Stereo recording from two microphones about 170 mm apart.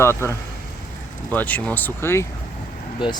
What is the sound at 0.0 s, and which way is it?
Speech, 15° left (ahead or behind).